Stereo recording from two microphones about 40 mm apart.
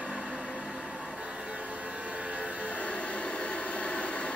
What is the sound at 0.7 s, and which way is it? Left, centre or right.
Vehicle, right.